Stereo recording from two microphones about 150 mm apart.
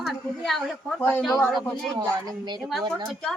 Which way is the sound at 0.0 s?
Centre (ahead or behind).